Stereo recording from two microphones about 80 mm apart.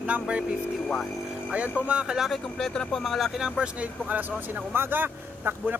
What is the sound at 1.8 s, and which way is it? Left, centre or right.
Speech, centre.